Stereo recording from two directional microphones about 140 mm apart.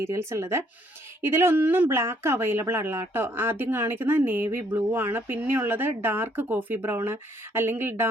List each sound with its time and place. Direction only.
0.0 s speech: 20° right (ahead or behind)